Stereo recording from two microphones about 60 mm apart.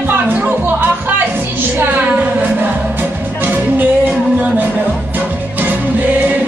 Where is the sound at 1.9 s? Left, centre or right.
Right.